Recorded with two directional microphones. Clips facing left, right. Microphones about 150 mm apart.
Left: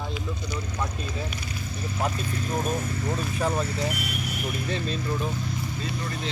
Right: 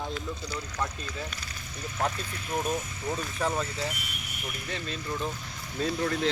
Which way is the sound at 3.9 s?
75° left (ahead or behind).